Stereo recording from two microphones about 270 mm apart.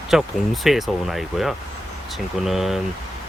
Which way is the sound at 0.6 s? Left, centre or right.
Centre.